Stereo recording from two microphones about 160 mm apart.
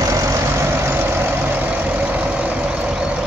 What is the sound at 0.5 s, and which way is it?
Vehicle, 15° right (ahead or behind).